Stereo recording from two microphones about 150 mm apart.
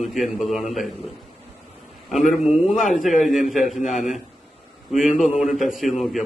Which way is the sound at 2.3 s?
Centre (ahead or behind).